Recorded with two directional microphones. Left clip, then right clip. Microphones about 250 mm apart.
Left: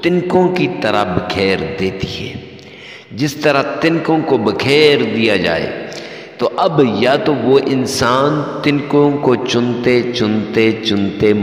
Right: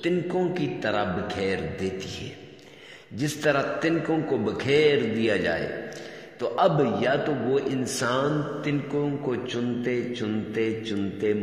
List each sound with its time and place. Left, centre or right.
0.0 s a man's voice: left
3.2 s a man's voice: left